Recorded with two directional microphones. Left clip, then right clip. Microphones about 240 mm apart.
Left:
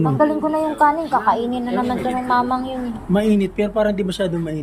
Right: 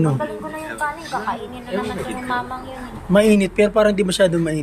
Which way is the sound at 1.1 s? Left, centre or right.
Left.